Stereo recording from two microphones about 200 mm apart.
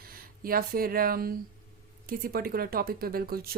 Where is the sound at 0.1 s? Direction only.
45° right (ahead or behind).